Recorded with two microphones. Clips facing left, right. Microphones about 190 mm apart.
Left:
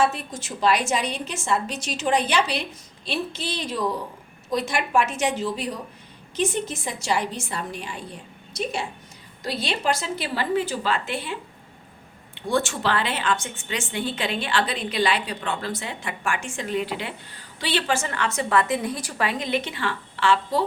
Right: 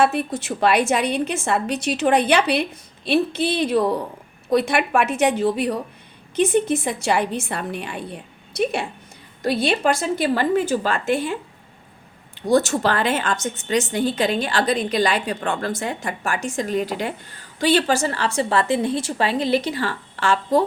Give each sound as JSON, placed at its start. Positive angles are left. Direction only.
{"t": 0.0, "sound": "a woman's voice", "side_deg": -60}